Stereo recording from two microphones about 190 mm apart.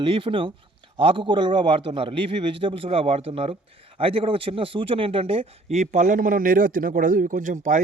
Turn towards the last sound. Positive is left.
turn(degrees=-40)  # may be behind; listen again after turning